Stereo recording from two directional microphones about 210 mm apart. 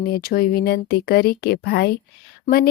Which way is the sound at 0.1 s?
45° left (ahead or behind).